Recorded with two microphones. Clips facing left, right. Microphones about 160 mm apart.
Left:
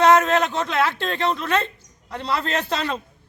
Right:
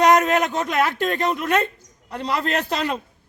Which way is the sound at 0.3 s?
10° right (ahead or behind).